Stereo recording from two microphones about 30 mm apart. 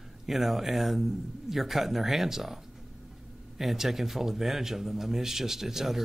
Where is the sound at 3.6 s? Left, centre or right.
Centre.